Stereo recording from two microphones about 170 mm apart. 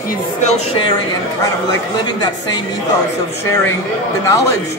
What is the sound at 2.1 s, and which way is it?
Speech, 25° left (ahead or behind).